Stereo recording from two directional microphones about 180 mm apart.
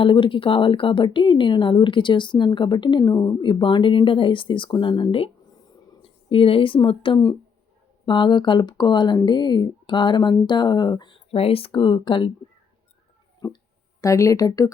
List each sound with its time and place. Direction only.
0.0 s speech: 30° left (ahead or behind)
13.4 s speech: 20° left (ahead or behind)